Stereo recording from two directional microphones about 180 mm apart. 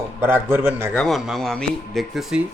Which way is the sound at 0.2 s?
10° right (ahead or behind).